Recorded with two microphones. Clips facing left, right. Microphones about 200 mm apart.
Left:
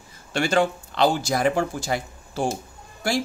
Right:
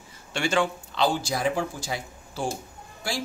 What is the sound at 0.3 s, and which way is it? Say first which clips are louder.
Speech: left 4 dB; 40° left (ahead or behind).